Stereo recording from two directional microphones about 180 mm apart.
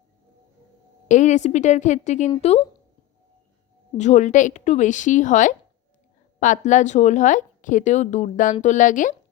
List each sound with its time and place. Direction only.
1.0 s a woman's voice: 40° left (ahead or behind)
3.9 s a woman's voice: 40° left (ahead or behind)